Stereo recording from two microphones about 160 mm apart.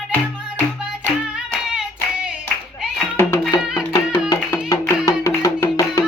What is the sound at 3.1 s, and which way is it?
Music, 20° left (ahead or behind).